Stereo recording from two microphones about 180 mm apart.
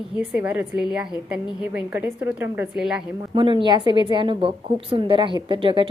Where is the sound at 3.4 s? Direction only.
25° right (ahead or behind).